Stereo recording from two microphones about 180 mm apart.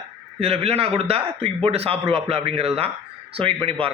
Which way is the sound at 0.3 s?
35° right (ahead or behind).